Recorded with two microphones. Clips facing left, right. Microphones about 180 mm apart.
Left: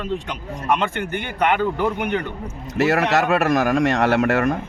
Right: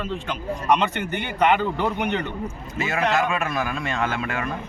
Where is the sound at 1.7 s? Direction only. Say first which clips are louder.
Left 2 dB; 10° left (ahead or behind).